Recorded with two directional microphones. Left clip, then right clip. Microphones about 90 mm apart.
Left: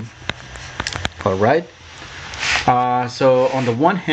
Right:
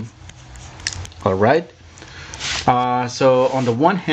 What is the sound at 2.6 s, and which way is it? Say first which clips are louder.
Speech: right 1 dB; 15° right (ahead or behind).